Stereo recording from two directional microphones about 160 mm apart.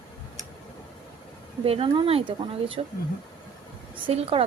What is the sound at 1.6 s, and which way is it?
Speech, 35° right (ahead or behind).